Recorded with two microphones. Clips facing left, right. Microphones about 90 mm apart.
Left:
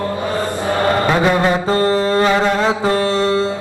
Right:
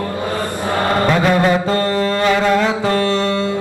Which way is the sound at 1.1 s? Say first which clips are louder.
Even; 25° left (ahead or behind).